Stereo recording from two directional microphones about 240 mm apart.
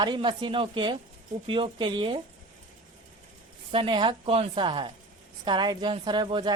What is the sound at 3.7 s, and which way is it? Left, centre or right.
A woman's voice, right.